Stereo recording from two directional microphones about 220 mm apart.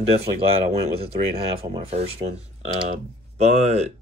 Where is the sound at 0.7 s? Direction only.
25° right (ahead or behind).